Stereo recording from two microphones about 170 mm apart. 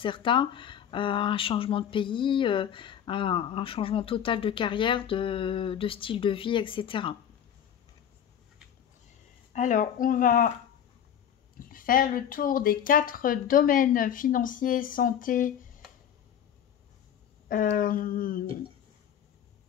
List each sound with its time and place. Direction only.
0.0 s speech: 30° left (ahead or behind)
9.5 s speech: 45° left (ahead or behind)
11.7 s speech: 55° left (ahead or behind)
17.5 s a sound: 55° left (ahead or behind)